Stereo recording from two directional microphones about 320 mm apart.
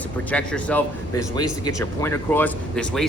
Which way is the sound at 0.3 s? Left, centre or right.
Centre.